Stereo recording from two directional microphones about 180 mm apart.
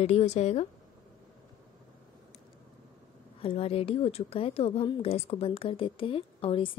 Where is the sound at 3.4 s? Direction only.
35° left (ahead or behind).